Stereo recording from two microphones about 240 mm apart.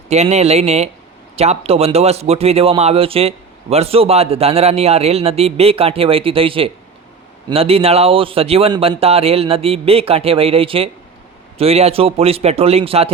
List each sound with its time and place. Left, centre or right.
0.1 s a man's voice: right